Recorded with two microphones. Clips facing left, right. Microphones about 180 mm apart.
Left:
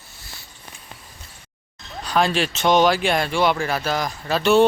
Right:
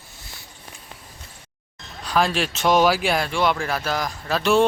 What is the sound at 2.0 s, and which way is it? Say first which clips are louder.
Speech: left 1 dB; centre (ahead or behind).